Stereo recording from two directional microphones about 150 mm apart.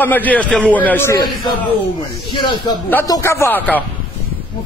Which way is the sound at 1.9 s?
30° left (ahead or behind).